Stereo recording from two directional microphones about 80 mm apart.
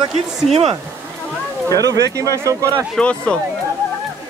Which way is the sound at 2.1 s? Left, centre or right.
Right.